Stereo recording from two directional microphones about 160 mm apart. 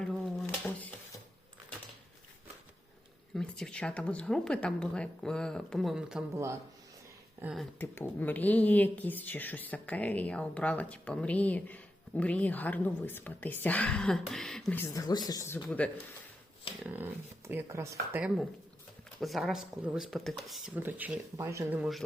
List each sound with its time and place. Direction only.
0.0 s dishes: 5° left (ahead or behind)
3.3 s speech: 5° left (ahead or behind)
6.3 s speech: 15° right (ahead or behind)
7.4 s speech: centre (ahead or behind)
7.8 s speech: 10° left (ahead or behind)
16.8 s speech: 10° right (ahead or behind)
21.8 s speech: centre (ahead or behind)